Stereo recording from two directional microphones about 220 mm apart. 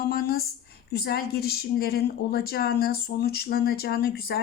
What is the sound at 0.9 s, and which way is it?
A woman's voice, 45° left (ahead or behind).